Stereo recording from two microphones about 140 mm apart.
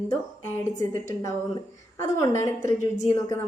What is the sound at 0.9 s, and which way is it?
A woman's voice, 20° left (ahead or behind).